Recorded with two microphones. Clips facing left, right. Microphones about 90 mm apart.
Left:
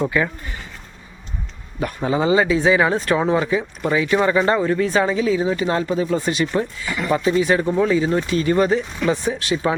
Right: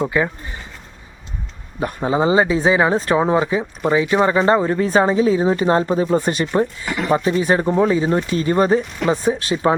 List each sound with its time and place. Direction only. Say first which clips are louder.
0.0 s speech: right 1 dB; 20° right (ahead or behind)
1.8 s speech: right 2 dB; 25° right (ahead or behind); by 6.5 s 45° right (ahead or behind)
6.6 s speech: right 3 dB; 30° right (ahead or behind)